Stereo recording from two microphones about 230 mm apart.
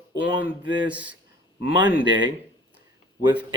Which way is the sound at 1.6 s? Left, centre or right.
Left.